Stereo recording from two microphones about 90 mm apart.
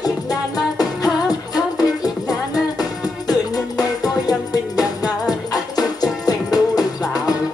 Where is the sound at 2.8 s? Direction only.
45° left (ahead or behind).